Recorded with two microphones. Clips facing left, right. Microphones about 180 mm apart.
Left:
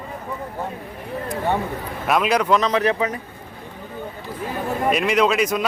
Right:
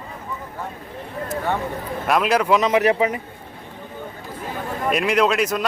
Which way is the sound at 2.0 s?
Centre (ahead or behind).